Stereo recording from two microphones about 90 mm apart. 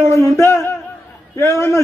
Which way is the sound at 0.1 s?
30° left (ahead or behind).